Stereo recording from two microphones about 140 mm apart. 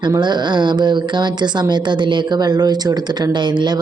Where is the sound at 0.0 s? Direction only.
30° right (ahead or behind).